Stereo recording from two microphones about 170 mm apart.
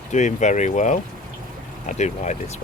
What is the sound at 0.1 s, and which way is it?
Speech, 45° left (ahead or behind).